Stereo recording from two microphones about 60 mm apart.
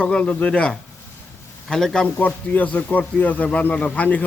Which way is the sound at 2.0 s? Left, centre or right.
Left.